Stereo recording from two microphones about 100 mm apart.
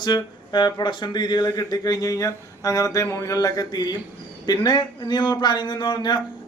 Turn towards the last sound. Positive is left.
turn(degrees=50)  # may be behind; listen again after turning